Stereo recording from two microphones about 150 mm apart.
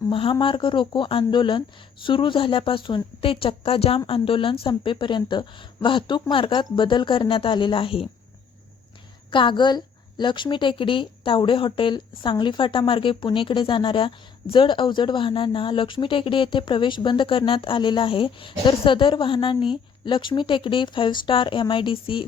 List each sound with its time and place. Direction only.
0.1 s speech: 35° left (ahead or behind)
9.3 s speech: 35° left (ahead or behind)